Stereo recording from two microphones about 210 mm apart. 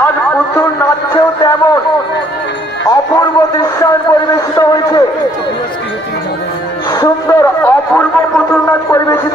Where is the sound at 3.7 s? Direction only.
15° left (ahead or behind).